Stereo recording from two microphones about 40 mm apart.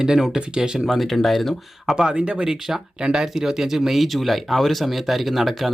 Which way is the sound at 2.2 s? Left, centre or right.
Right.